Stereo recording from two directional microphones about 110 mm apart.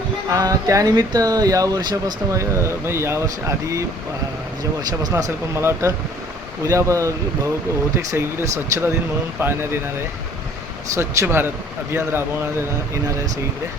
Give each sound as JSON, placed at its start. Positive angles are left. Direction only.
{"t": 0.3, "sound": "speech", "side_deg": -30}
{"t": 4.8, "sound": "speech", "side_deg": -35}
{"t": 5.1, "sound": "speech", "side_deg": -25}
{"t": 10.9, "sound": "speech", "side_deg": -25}
{"t": 13.1, "sound": "speech", "side_deg": -30}